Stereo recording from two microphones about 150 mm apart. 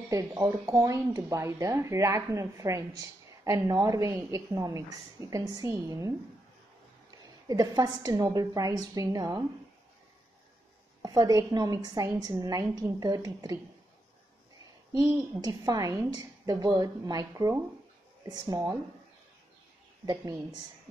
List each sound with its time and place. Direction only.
0.1 s speech: 25° right (ahead or behind)
7.4 s speech: 25° right (ahead or behind)
11.0 s speech: 25° right (ahead or behind)
14.9 s speech: 25° right (ahead or behind)